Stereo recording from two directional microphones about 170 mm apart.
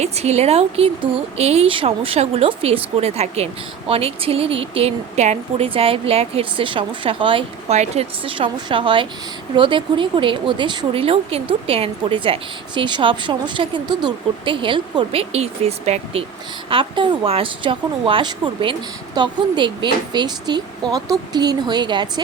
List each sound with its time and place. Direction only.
0.0 s a woman's voice: 40° right (ahead or behind)